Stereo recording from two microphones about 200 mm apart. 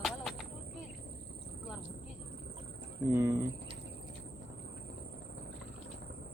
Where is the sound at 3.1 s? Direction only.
15° right (ahead or behind).